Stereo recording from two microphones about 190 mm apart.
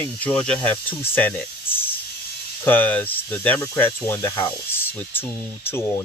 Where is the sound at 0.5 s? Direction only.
10° left (ahead or behind).